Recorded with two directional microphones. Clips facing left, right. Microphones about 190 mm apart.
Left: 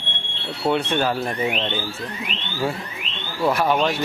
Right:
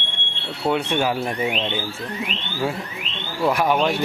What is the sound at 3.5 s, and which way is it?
Speech, 10° right (ahead or behind).